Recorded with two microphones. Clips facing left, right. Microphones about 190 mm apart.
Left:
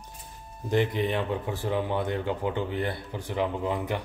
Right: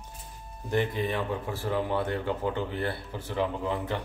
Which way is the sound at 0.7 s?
20° left (ahead or behind).